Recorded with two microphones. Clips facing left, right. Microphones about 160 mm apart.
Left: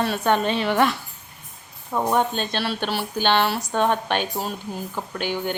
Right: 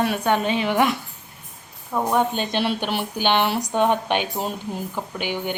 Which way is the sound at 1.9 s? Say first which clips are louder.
Even; centre (ahead or behind).